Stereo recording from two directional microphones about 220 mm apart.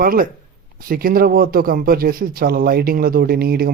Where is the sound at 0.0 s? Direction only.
40° right (ahead or behind).